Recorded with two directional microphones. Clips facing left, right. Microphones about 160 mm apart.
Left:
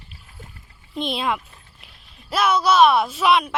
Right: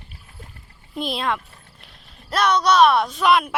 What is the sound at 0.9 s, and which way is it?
Speech, centre (ahead or behind).